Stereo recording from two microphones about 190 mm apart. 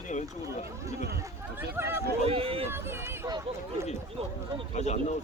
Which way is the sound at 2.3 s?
30° right (ahead or behind).